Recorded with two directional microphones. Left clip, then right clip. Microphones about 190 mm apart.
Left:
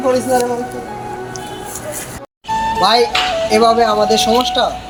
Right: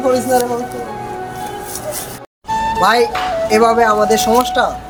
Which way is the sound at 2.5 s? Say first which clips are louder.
Even; centre (ahead or behind).